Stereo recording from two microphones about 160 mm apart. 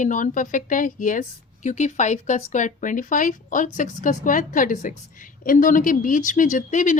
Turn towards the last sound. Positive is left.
turn(degrees=50)  # may be behind; listen again after turning